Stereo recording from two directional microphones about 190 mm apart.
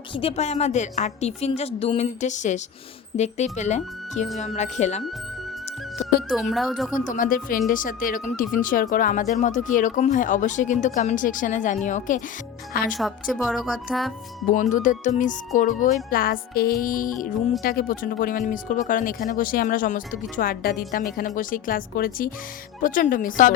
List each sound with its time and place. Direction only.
0.1 s speech: 30° left (ahead or behind)
6.0 s music: 35° left (ahead or behind)
6.5 s speech: centre (ahead or behind)
6.9 s speech: 45° left (ahead or behind)
12.9 s speech: centre (ahead or behind)
14.5 s speech: 40° left (ahead or behind)